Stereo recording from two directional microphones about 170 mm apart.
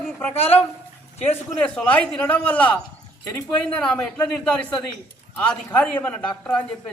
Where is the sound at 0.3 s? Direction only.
35° left (ahead or behind).